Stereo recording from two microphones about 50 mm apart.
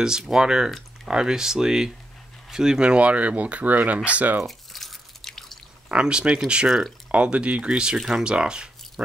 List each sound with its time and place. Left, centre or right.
0.0 s speech: centre; by 4.4 s right
4.5 s drip: centre
5.9 s speech: centre